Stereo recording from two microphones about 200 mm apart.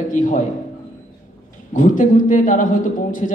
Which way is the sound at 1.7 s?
40° left (ahead or behind).